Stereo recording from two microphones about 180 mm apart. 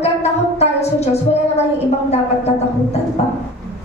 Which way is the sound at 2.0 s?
35° left (ahead or behind).